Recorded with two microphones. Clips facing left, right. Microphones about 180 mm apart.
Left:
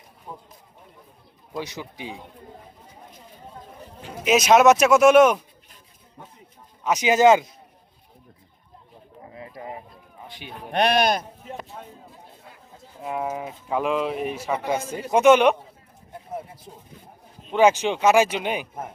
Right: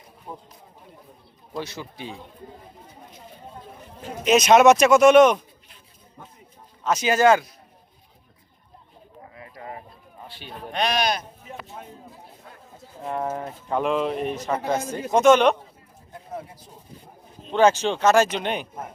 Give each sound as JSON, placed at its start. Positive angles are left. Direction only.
{"t": 0.3, "sound": "speech", "side_deg": -10}
{"t": 1.5, "sound": "speech", "side_deg": 15}
{"t": 4.2, "sound": "speech", "side_deg": 5}
{"t": 6.8, "sound": "speech", "side_deg": 15}
{"t": 9.3, "sound": "a sound", "side_deg": 25}
{"t": 10.2, "sound": "speech", "side_deg": 15}
{"t": 10.7, "sound": "speech", "side_deg": 55}
{"t": 13.0, "sound": "speech", "side_deg": 5}
{"t": 17.5, "sound": "speech", "side_deg": 10}